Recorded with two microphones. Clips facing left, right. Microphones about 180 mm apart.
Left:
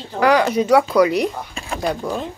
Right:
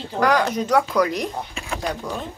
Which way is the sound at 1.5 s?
35° left (ahead or behind).